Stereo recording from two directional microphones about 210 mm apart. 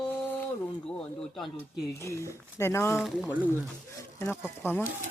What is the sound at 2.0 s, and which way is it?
Speech, 15° left (ahead or behind).